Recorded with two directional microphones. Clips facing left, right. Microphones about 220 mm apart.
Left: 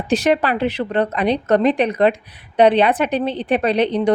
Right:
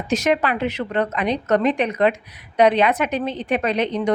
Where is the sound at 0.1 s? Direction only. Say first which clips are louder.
Left 3 dB; 35° left (ahead or behind).